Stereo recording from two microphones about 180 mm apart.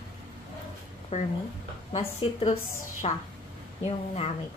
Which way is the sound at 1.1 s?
40° left (ahead or behind).